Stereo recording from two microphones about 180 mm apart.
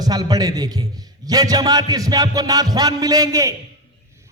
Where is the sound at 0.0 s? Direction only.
20° right (ahead or behind).